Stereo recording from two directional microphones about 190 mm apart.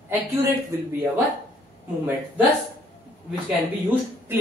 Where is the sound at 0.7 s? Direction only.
15° right (ahead or behind).